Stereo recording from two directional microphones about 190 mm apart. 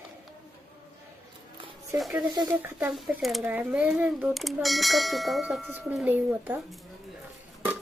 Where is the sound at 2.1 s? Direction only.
20° right (ahead or behind).